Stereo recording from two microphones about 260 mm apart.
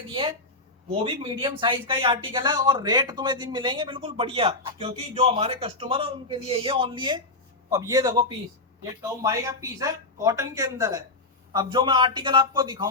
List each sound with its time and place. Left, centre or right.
0.9 s speech: centre